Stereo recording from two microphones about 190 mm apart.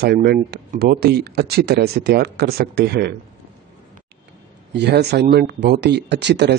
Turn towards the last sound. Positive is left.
turn(degrees=-65)  # may be behind; listen again after turning